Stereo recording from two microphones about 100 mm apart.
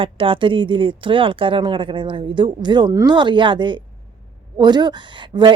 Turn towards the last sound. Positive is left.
turn(degrees=-50)  # may be behind; listen again after turning